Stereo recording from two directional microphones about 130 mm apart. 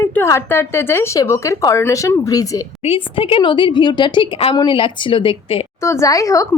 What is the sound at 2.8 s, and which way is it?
A woman's voice, 45° left (ahead or behind).